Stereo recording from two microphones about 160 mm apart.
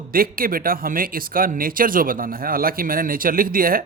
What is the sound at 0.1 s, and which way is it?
Speech, 65° right (ahead or behind).